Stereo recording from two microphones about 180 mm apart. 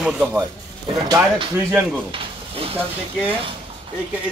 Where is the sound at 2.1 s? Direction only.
30° right (ahead or behind).